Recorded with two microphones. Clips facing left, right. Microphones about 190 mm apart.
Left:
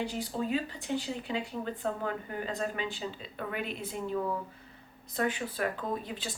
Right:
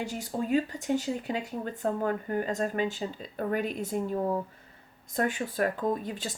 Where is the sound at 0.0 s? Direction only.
45° right (ahead or behind).